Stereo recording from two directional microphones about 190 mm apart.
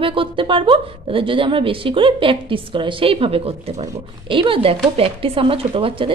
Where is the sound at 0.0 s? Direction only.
25° right (ahead or behind).